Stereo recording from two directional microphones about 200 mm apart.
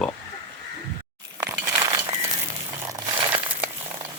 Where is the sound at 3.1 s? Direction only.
25° right (ahead or behind).